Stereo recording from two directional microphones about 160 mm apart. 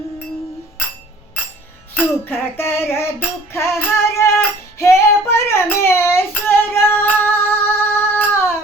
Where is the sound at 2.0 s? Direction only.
10° left (ahead or behind).